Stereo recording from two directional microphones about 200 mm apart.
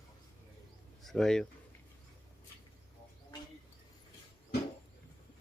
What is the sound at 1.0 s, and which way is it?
Speech, 5° left (ahead or behind).